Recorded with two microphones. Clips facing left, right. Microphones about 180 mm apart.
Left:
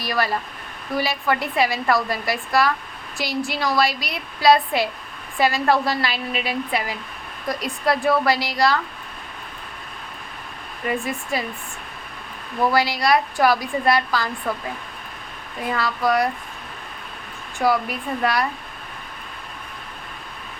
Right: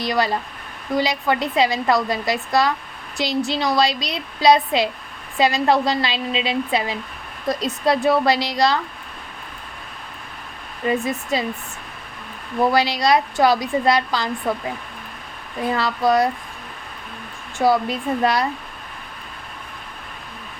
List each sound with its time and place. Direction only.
0.0 s a woman's voice: 20° right (ahead or behind)
10.8 s a woman's voice: 20° right (ahead or behind)
12.7 s a woman's voice: 20° right (ahead or behind)
15.7 s a woman's voice: 25° right (ahead or behind)
17.6 s a woman's voice: 25° right (ahead or behind)